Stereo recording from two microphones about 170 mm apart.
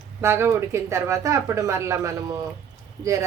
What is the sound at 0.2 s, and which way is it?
Speech, 15° right (ahead or behind).